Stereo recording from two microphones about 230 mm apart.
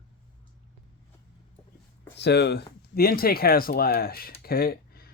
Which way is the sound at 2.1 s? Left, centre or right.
Left.